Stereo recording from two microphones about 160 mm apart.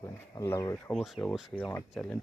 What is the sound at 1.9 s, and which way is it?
Speech, 5° left (ahead or behind).